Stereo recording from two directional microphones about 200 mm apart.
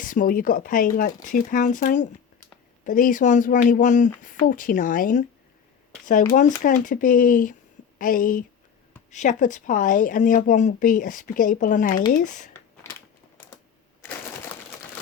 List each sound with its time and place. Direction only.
0.0 s speech: 45° left (ahead or behind)
6.6 s speech: 40° left (ahead or behind)
12.8 s a sound: 15° left (ahead or behind)